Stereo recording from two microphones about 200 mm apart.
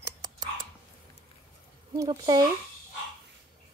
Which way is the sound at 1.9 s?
15° right (ahead or behind).